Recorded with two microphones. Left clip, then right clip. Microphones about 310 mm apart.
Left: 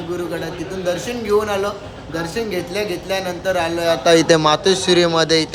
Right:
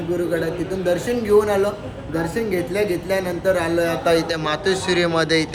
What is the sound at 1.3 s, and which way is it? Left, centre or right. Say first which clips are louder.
A man's voice: right 1 dB; centre.